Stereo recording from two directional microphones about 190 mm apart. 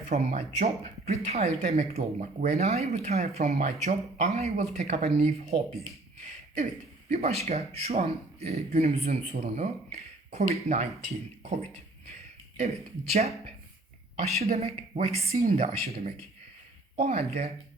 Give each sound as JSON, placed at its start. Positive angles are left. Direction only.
{"t": 0.1, "sound": "speech", "side_deg": -35}
{"t": 6.2, "sound": "a sound", "side_deg": -40}
{"t": 7.1, "sound": "speech", "side_deg": -35}
{"t": 12.5, "sound": "speech", "side_deg": -35}